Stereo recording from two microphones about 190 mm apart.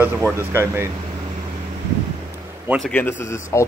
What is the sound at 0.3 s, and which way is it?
Speech, 15° right (ahead or behind).